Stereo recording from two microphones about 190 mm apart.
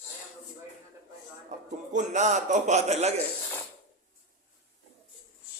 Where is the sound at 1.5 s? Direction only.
40° right (ahead or behind).